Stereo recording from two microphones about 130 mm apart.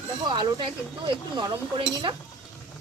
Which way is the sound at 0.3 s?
35° right (ahead or behind).